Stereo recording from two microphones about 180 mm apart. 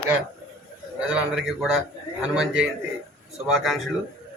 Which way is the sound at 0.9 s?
5° right (ahead or behind).